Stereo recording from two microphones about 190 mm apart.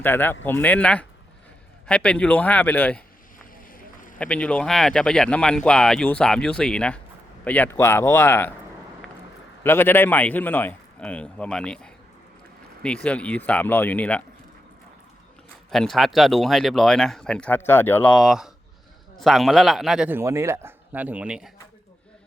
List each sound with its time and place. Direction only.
0.0 s a man's voice: 10° left (ahead or behind)
3.5 s a sound: 45° left (ahead or behind)
4.2 s a man's voice: 5° left (ahead or behind)
9.6 s a man's voice: 10° left (ahead or behind)
15.7 s speech: centre (ahead or behind)